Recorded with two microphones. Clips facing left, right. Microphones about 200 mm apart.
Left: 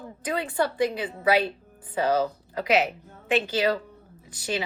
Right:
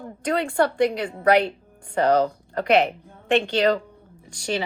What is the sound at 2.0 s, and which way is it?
Speech, 65° right (ahead or behind).